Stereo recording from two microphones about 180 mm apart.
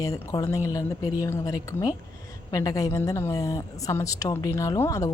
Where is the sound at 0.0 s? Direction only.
20° left (ahead or behind).